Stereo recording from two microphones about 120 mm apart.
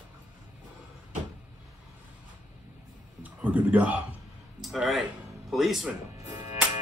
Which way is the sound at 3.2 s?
10° right (ahead or behind).